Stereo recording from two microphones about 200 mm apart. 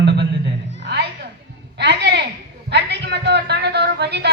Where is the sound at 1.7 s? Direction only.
60° right (ahead or behind).